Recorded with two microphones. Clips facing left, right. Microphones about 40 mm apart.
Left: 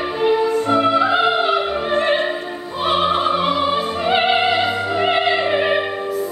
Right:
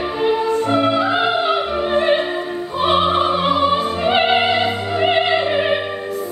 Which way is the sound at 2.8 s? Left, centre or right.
Centre.